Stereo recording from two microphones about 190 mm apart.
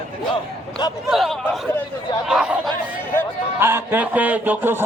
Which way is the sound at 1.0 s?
Centre (ahead or behind).